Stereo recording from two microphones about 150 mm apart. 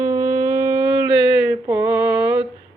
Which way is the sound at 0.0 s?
15° right (ahead or behind).